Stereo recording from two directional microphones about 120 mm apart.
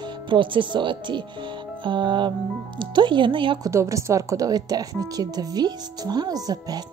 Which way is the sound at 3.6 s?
25° right (ahead or behind).